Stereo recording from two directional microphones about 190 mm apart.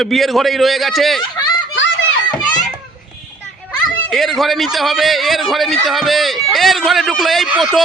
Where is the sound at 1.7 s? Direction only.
80° left.